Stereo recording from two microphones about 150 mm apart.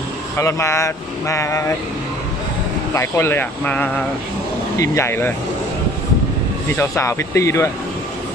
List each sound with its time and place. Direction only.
0.3 s speech: 20° left (ahead or behind)
2.9 s speech: 20° left (ahead or behind)
6.7 s speech: 15° left (ahead or behind)